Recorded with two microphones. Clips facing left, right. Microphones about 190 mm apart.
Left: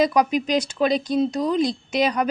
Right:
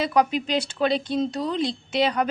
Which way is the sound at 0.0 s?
15° left (ahead or behind).